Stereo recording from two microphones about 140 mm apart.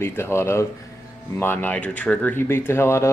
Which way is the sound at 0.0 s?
15° left (ahead or behind).